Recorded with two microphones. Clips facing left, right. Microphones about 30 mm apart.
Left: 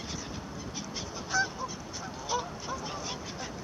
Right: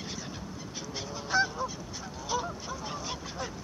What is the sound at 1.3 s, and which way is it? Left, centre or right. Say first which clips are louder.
Goose: right 2 dB; right.